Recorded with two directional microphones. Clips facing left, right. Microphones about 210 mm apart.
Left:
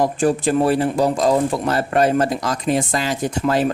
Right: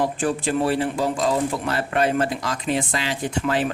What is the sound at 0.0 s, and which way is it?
Speech, 40° left (ahead or behind).